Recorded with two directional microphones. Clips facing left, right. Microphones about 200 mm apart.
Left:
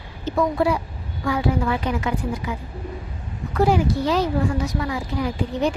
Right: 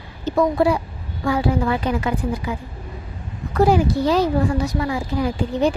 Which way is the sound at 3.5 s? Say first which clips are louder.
Right 3 dB; 40° right (ahead or behind).